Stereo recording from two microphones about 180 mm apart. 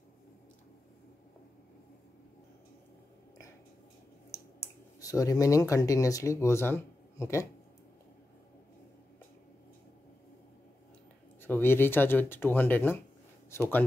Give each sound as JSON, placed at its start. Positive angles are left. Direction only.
{"t": 5.0, "sound": "speech", "side_deg": 20}
{"t": 11.4, "sound": "speech", "side_deg": 10}